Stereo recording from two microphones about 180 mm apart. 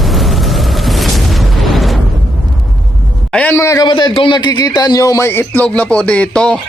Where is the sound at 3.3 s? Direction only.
10° left (ahead or behind).